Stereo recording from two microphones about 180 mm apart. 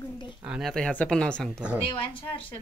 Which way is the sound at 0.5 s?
Centre (ahead or behind).